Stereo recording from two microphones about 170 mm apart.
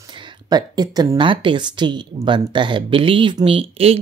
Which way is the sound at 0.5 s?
25° right (ahead or behind).